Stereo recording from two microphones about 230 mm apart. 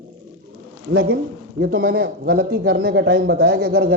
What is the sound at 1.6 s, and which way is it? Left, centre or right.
Speech, right.